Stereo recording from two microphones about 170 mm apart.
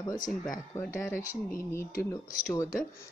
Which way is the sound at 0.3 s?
5° left (ahead or behind).